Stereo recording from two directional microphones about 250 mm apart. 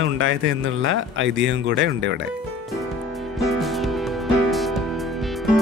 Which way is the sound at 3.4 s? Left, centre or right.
Centre.